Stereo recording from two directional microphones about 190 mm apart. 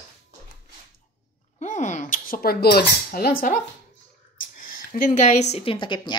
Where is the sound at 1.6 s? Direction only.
40° left (ahead or behind).